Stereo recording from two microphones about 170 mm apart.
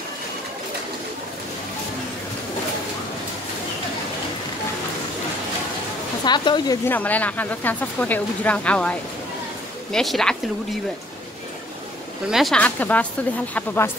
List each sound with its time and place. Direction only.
6.2 s speech: 25° left (ahead or behind)
6.9 s speech: 10° left (ahead or behind)
9.9 s speech: centre (ahead or behind)
12.3 s speech: centre (ahead or behind)